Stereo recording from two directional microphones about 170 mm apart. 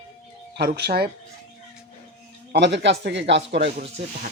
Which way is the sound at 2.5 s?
85° right.